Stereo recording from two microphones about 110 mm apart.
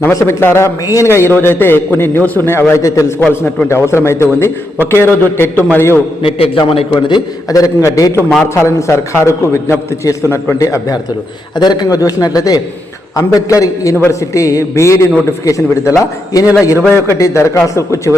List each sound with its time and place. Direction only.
0.0 s a man's voice: 25° left (ahead or behind)
3.2 s a man's voice: 15° left (ahead or behind)
3.7 s a man's voice: 25° left (ahead or behind)
6.2 s a man's voice: 55° left (ahead or behind)
6.9 s a man's voice: 40° left (ahead or behind)
11.5 s a man's voice: 40° left (ahead or behind)